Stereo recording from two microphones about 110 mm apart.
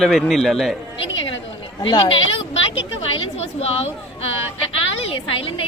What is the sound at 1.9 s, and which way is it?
A woman's voice, 55° left (ahead or behind).